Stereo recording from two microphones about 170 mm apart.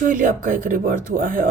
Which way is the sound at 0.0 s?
55° right (ahead or behind).